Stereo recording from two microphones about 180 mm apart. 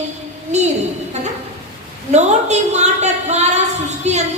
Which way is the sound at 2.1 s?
40° right (ahead or behind).